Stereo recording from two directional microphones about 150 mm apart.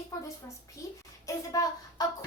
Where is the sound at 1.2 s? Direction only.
25° left (ahead or behind).